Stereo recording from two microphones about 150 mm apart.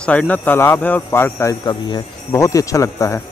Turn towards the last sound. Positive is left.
turn(degrees=20)  # may be behind; listen again after turning